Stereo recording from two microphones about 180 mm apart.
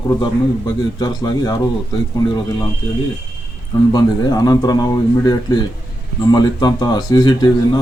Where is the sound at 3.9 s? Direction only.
20° left (ahead or behind).